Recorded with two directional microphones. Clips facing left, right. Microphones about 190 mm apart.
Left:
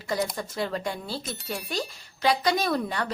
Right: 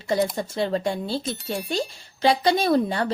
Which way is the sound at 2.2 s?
30° right (ahead or behind).